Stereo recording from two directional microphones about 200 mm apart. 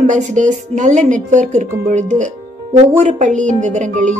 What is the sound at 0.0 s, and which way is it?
A woman's voice, 40° right (ahead or behind).